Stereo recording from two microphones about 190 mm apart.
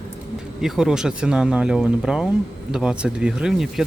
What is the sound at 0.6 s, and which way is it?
Speech, 5° right (ahead or behind).